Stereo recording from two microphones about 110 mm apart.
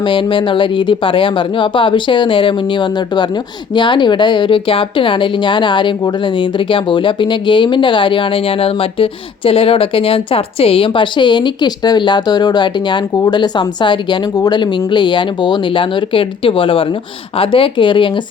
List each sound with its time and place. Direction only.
0.0 s a woman's voice: 50° left (ahead or behind)